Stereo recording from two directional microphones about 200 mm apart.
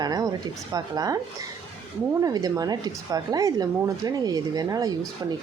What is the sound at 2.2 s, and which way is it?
A woman's voice, 20° right (ahead or behind).